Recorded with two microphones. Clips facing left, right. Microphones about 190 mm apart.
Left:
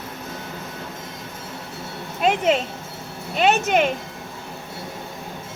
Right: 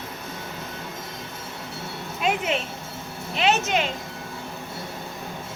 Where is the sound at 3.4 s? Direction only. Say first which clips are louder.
Left 4 dB; 55° left (ahead or behind).